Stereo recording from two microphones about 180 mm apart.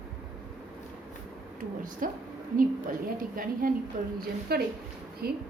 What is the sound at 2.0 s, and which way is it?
A woman's voice, 50° right (ahead or behind).